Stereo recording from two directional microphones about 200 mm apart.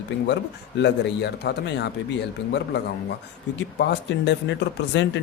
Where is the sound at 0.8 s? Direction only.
60° left (ahead or behind).